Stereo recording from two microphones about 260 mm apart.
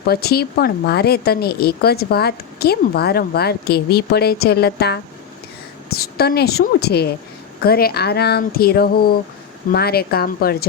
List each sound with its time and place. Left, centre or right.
0.0 s a woman's voice: left